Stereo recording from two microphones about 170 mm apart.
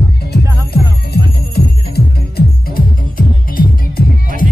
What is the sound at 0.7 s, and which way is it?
Music, 70° left (ahead or behind).